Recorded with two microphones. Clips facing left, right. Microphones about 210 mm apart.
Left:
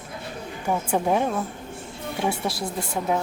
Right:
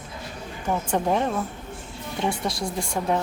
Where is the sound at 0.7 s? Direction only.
10° left (ahead or behind).